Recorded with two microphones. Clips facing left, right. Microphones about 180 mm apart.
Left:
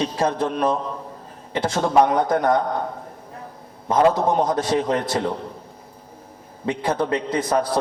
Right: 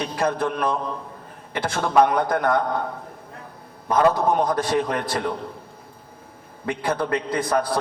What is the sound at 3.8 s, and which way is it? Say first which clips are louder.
A man's voice: left 1 dB; 25° left (ahead or behind).